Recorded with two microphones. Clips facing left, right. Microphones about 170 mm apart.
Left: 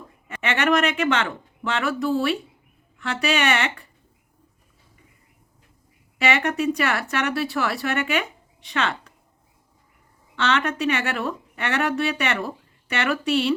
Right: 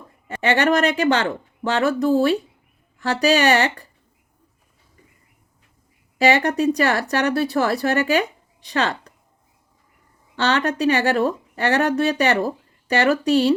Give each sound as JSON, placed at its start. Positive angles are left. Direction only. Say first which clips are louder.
{"t": 0.3, "sound": "speech", "louder": "right 4 dB", "side_deg": -35}
{"t": 6.1, "sound": "speech", "louder": "right 5 dB", "side_deg": -35}
{"t": 10.3, "sound": "speech", "louder": "right 3 dB", "side_deg": -35}